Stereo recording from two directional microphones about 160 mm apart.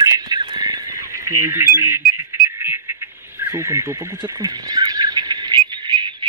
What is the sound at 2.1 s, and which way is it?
Insect, 15° right (ahead or behind).